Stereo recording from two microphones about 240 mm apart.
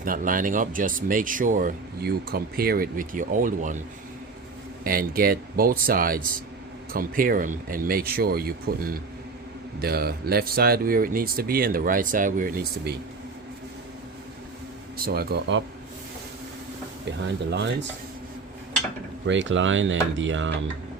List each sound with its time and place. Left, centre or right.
0.0 s speech: right
4.8 s speech: right
14.9 s speech: right
17.1 s speech: right
19.3 s speech: right